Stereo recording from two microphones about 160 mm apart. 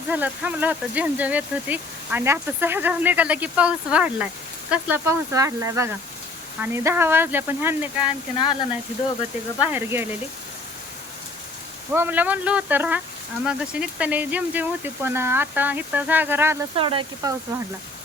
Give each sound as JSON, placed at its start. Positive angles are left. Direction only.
{"t": 0.1, "sound": "speech", "side_deg": -10}
{"t": 9.6, "sound": "speech", "side_deg": -10}
{"t": 11.9, "sound": "speech", "side_deg": -10}
{"t": 16.7, "sound": "speech", "side_deg": -35}